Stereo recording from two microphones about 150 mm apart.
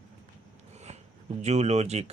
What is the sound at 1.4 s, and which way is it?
Speech, 50° right (ahead or behind).